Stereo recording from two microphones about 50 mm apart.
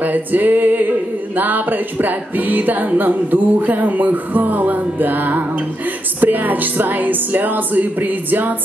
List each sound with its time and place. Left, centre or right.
0.0 s music: right